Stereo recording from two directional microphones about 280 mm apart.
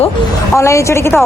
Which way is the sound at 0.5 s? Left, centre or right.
Centre.